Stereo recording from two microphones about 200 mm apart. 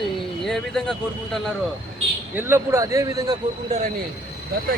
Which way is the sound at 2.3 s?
10° right (ahead or behind).